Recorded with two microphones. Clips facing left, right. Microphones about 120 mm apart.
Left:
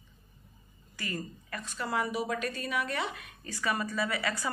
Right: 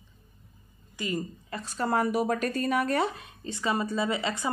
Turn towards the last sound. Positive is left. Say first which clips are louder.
# right 3 dB
turn(degrees=-25)  # may be behind; listen again after turning